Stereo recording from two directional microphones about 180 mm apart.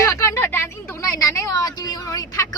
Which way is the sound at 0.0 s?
15° left (ahead or behind).